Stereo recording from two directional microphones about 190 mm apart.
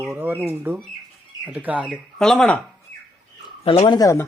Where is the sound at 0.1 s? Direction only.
10° right (ahead or behind).